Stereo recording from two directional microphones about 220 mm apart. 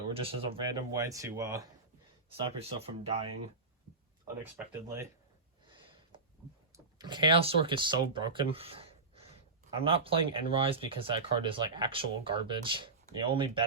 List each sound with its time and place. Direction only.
0.1 s speech: 25° right (ahead or behind)
2.6 s speech: 25° right (ahead or behind)
4.5 s speech: 10° right (ahead or behind)
5.7 s a sound: 20° right (ahead or behind)
6.7 s speech: 20° right (ahead or behind)